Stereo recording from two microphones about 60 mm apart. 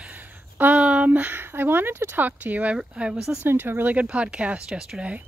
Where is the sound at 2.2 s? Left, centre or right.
Right.